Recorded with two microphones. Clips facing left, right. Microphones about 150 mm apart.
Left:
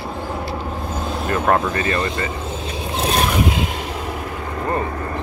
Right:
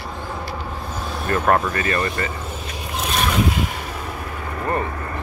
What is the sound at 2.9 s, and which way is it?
Boat, 35° left (ahead or behind).